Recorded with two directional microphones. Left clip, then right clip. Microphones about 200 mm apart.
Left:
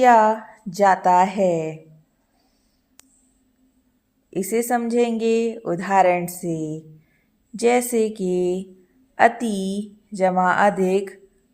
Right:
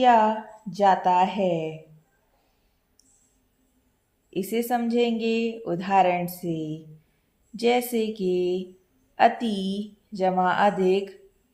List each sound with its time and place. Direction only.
0.0 s speech: 40° left (ahead or behind)
4.3 s speech: 35° left (ahead or behind)